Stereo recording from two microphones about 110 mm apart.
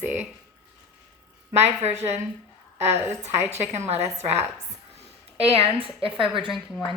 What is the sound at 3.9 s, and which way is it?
Speech, 80° right.